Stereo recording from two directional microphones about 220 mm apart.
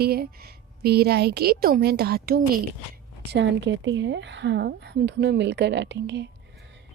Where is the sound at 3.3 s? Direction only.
55° right (ahead or behind).